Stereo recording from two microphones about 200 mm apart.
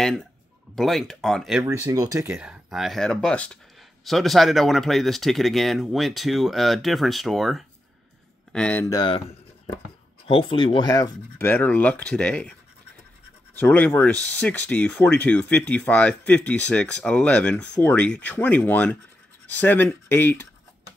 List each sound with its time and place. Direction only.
0.0 s speech: centre (ahead or behind)
1.7 s speech: 15° right (ahead or behind)
2.3 s speech: 5° right (ahead or behind); by 9.2 s 20° left (ahead or behind)
10.2 s speech: 25° left (ahead or behind); by 12.5 s 5° left (ahead or behind)
13.6 s speech: 10° left (ahead or behind)